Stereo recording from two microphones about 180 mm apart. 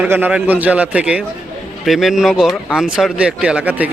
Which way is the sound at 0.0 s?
10° right (ahead or behind).